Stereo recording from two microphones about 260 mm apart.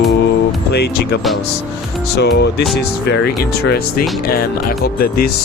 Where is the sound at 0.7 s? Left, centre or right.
Left.